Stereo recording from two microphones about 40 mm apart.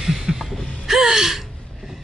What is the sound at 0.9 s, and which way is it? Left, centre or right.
Gasp, centre.